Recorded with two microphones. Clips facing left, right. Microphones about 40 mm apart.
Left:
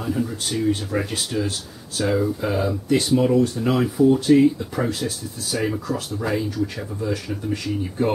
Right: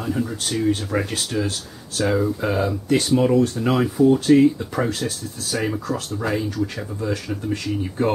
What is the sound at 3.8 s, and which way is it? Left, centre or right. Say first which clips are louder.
Speech: right 1 dB; centre.